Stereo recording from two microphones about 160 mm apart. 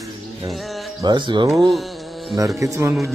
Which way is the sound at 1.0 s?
30° right (ahead or behind).